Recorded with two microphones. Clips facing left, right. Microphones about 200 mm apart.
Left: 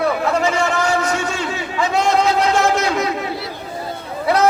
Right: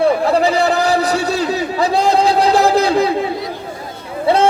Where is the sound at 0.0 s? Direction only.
35° right (ahead or behind).